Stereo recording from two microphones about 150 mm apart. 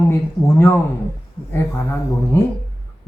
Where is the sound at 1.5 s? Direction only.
15° left (ahead or behind).